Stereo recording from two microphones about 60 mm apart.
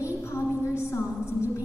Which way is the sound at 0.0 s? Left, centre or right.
Left.